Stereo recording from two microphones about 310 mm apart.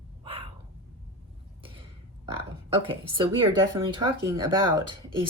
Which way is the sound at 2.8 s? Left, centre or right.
Centre.